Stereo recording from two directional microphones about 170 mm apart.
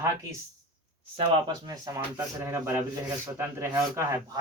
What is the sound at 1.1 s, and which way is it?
Speech, 25° right (ahead or behind).